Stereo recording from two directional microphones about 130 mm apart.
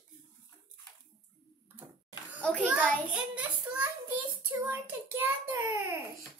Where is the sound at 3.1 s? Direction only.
10° right (ahead or behind).